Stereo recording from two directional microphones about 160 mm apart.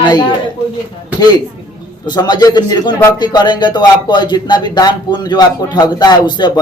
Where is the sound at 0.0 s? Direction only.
25° left (ahead or behind).